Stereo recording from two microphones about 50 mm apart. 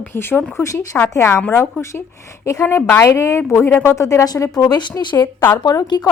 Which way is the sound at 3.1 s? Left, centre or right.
Left.